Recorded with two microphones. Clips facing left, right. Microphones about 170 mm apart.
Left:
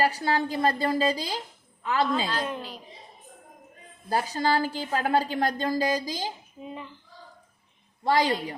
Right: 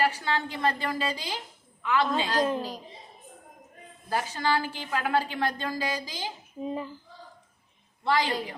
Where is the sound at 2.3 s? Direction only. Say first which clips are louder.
Right 4 dB; 35° right (ahead or behind).